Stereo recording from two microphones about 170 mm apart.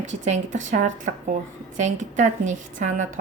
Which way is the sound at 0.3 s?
45° right (ahead or behind).